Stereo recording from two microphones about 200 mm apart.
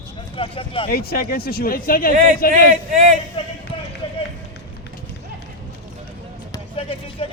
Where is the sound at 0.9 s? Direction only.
50° left (ahead or behind).